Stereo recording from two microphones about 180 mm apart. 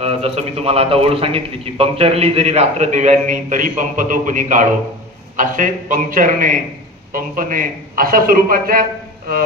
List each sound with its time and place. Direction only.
0.0 s a man's voice: 35° right (ahead or behind); by 8.8 s 55° right (ahead or behind)